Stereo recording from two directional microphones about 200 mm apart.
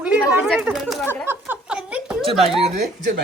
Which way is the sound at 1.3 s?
5° right (ahead or behind).